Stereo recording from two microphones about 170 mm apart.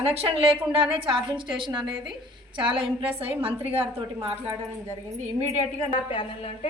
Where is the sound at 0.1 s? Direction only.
35° right (ahead or behind).